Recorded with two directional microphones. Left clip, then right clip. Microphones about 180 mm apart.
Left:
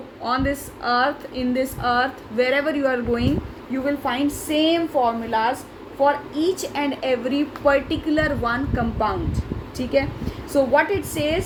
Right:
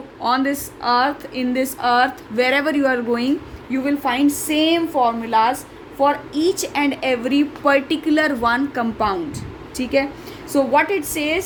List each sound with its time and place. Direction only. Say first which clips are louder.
0.2 s a woman's voice: right 4 dB; 65° right (ahead or behind)